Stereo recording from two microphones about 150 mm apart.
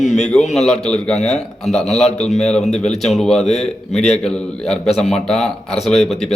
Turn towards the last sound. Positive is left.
turn(degrees=0)  # may be behind; listen again after turning